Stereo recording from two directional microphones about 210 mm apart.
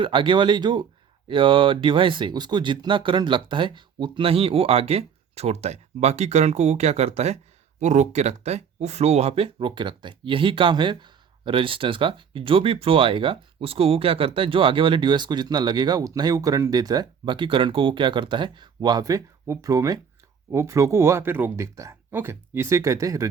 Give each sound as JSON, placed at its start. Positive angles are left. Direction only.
{"t": 0.0, "sound": "speech", "side_deg": -25}